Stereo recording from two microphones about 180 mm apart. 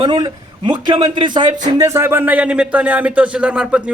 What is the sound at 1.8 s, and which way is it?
A man's voice, 15° right (ahead or behind).